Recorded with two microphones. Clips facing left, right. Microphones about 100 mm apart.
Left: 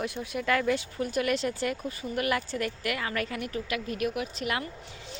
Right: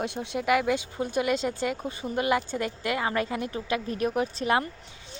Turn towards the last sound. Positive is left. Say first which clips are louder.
# right 6 dB
turn(degrees=-30)  # may be behind; listen again after turning